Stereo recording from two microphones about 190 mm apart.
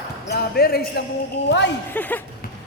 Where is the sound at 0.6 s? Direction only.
55° left (ahead or behind).